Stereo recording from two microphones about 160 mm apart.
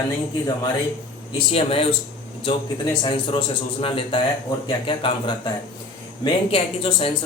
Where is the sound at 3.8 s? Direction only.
35° left (ahead or behind).